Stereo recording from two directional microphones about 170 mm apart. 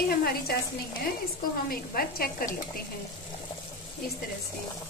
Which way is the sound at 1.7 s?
60° left (ahead or behind).